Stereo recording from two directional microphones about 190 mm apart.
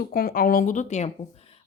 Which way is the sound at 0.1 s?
50° left (ahead or behind).